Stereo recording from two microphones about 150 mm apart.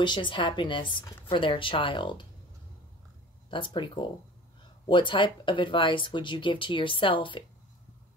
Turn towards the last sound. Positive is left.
turn(degrees=35)  # may be behind; listen again after turning